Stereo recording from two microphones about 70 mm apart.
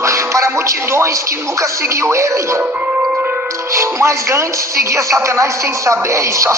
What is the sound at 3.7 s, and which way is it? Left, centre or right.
Speech, right.